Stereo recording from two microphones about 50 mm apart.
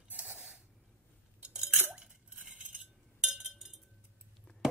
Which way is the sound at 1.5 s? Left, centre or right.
Centre.